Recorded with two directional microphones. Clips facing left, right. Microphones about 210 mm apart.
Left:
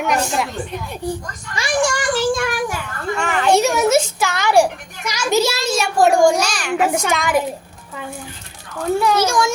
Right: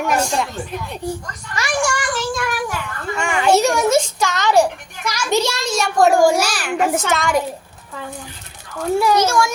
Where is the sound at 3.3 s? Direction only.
Centre (ahead or behind).